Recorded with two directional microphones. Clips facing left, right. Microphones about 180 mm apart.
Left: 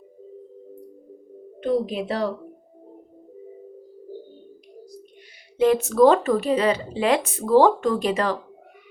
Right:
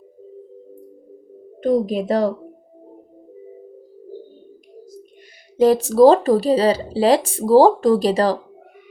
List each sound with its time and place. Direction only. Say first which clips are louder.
1.6 s speech: right 5 dB; 40° right (ahead or behind)
5.5 s speech: right 4 dB; 35° right (ahead or behind)